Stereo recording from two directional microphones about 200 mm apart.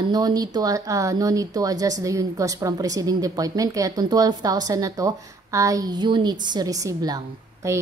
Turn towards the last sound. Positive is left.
turn(degrees=-15)  # may be behind; listen again after turning